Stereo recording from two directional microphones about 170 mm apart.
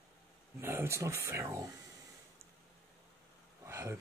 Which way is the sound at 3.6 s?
15° right (ahead or behind).